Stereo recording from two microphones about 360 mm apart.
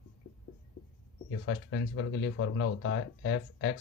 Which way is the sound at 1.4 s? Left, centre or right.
Left.